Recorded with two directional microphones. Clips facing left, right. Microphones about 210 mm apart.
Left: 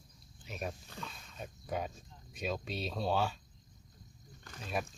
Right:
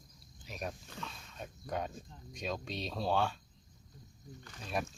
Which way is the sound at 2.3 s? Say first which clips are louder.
Left 1 dB; 5° left (ahead or behind).